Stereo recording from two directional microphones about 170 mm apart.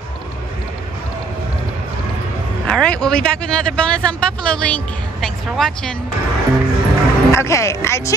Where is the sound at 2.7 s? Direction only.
5° left (ahead or behind).